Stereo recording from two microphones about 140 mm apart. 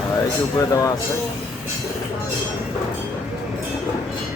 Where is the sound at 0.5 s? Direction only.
25° left (ahead or behind).